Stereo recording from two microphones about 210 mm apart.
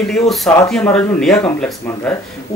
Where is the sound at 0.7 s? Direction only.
5° left (ahead or behind).